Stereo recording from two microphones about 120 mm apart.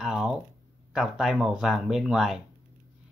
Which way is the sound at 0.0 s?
5° right (ahead or behind).